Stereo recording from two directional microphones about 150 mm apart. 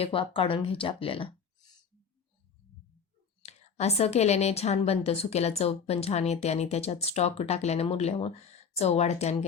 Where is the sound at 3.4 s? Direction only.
45° left (ahead or behind).